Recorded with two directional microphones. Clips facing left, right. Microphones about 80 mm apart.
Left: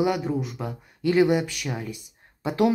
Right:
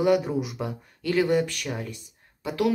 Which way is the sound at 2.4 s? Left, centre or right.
Left.